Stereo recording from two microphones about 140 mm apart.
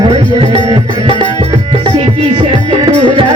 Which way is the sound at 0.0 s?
35° right (ahead or behind).